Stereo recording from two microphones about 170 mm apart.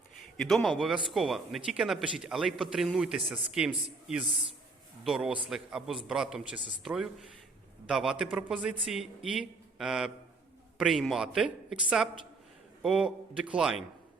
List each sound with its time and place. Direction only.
0.3 s speech: centre (ahead or behind)
5.0 s speech: centre (ahead or behind)